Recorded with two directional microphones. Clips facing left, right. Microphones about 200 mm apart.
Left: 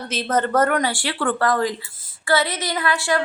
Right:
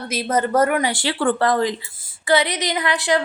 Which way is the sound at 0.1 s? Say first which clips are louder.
Right 1 dB; 10° right (ahead or behind).